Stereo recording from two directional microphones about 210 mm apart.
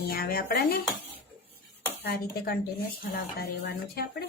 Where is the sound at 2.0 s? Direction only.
50° left (ahead or behind).